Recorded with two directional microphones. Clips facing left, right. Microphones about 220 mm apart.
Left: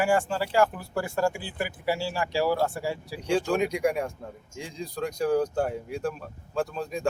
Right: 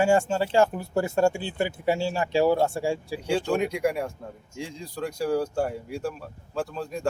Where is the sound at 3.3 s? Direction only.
Centre (ahead or behind).